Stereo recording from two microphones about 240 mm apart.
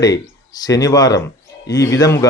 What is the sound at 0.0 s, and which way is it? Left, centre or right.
Speech, centre.